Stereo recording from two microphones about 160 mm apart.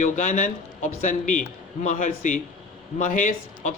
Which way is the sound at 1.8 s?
50° left (ahead or behind).